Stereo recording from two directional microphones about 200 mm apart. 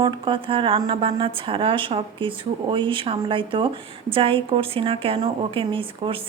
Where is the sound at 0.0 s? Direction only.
25° right (ahead or behind).